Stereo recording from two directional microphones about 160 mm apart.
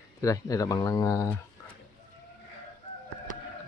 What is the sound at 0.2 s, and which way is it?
Speech, 20° left (ahead or behind).